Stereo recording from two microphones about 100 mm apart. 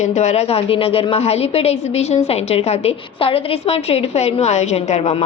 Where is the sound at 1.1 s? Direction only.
90° left.